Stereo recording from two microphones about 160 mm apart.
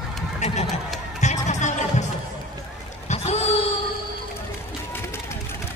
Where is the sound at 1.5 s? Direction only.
50° left (ahead or behind).